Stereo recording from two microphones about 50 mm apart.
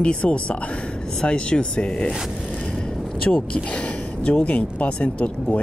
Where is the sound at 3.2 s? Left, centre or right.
Left.